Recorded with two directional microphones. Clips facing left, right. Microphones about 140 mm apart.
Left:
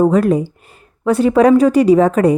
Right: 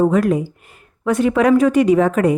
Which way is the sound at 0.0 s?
35° left (ahead or behind).